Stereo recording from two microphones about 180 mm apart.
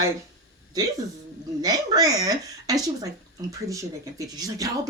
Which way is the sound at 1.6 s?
20° right (ahead or behind).